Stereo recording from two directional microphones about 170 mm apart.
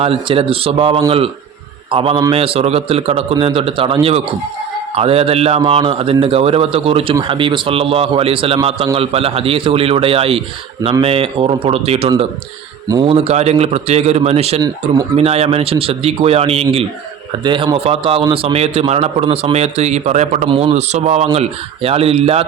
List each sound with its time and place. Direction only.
0.0 s a man's voice: 35° right (ahead or behind)
4.9 s a man's voice: 35° right (ahead or behind)